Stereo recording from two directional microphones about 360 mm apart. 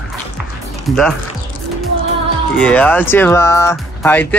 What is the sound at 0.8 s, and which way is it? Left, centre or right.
Speech, centre.